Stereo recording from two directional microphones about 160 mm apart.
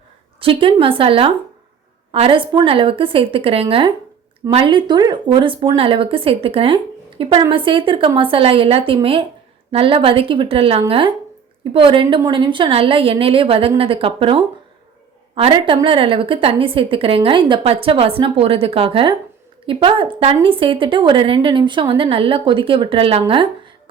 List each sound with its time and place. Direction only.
0.3 s a woman's voice: 35° right (ahead or behind)